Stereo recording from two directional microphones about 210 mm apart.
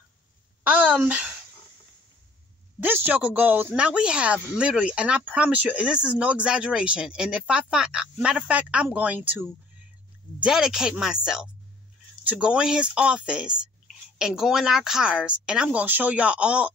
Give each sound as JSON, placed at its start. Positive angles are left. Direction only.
{"t": 0.7, "sound": "a woman's voice", "side_deg": -5}
{"t": 2.8, "sound": "speech", "side_deg": -10}